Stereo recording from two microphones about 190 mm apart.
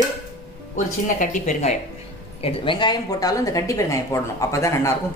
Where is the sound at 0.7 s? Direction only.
40° left (ahead or behind).